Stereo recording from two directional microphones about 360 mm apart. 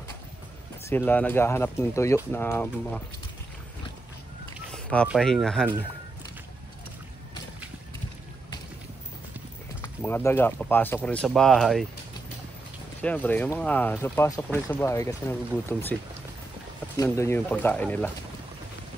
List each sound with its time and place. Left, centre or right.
0.8 s speech: centre
4.6 s speech: centre
10.0 s speech: centre
13.0 s speech: centre